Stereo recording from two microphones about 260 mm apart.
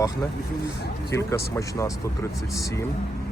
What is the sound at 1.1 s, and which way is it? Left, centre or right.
Speech, centre.